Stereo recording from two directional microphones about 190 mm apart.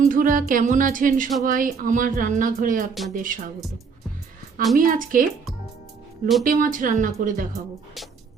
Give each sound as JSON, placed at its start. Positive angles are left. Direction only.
{"t": 0.0, "sound": "speech", "side_deg": -45}
{"t": 4.8, "sound": "speech", "side_deg": -45}
{"t": 6.4, "sound": "speech", "side_deg": -45}